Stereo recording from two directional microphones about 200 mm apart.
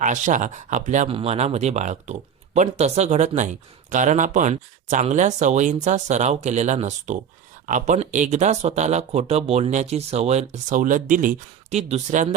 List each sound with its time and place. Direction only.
0.0 s speech: 40° right (ahead or behind)